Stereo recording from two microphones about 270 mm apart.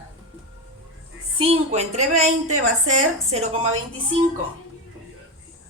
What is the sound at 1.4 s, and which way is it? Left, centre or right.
A woman's voice, right.